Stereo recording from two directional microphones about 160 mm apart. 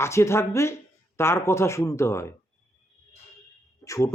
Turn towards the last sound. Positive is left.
turn(degrees=20)  # may be behind; listen again after turning